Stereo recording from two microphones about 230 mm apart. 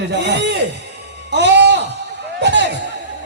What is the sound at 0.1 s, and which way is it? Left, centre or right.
Speech, right.